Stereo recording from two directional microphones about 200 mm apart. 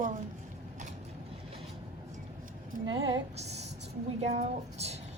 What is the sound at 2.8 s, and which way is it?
A woman's voice, 25° right (ahead or behind).